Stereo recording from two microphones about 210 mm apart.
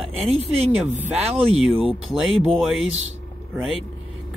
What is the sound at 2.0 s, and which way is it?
Speech, centre (ahead or behind).